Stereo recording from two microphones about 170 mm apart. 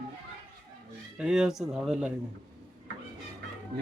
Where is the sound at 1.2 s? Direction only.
5° right (ahead or behind).